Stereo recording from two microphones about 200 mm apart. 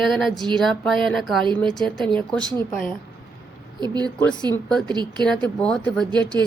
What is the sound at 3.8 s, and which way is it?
A woman's voice, 20° right (ahead or behind).